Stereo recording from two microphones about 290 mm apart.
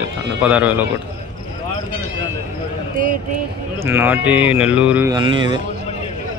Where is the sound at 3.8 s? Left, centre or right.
Centre.